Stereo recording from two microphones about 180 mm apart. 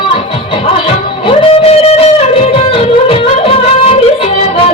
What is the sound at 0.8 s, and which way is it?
Music, 35° left (ahead or behind).